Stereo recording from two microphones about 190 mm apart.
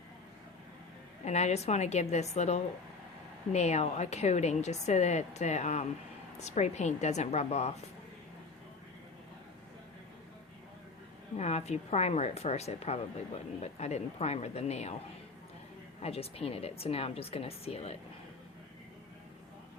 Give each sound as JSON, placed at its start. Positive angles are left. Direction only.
{"t": 1.2, "sound": "a woman's voice", "side_deg": 35}
{"t": 11.3, "sound": "a woman's voice", "side_deg": 35}
{"t": 16.0, "sound": "a woman's voice", "side_deg": 30}